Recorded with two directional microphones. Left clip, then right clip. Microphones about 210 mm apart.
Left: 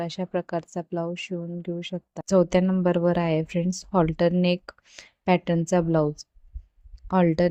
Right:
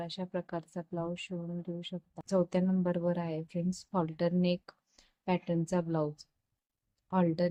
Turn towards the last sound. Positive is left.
turn(degrees=30)  # may be behind; listen again after turning